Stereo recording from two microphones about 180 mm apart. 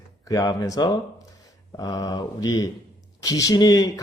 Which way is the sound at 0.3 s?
20° left (ahead or behind).